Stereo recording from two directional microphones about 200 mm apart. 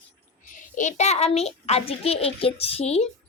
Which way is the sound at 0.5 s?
40° left (ahead or behind).